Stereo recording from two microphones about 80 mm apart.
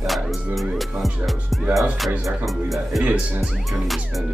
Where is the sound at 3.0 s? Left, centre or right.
Centre.